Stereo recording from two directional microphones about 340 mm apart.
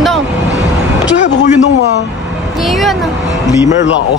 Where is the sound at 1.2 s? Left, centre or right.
Left.